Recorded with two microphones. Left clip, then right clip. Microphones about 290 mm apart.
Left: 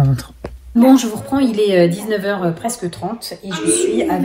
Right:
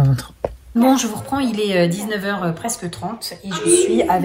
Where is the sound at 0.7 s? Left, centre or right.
Centre.